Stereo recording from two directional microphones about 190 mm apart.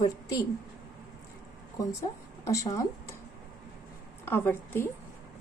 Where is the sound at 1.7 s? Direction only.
15° left (ahead or behind).